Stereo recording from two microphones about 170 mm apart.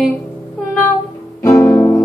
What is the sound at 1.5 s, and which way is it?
Music, 10° left (ahead or behind).